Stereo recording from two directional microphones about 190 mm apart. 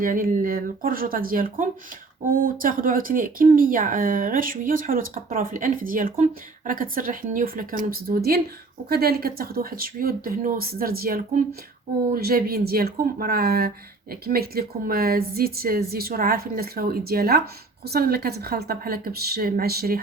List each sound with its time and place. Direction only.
0.0 s speech: 45° right (ahead or behind)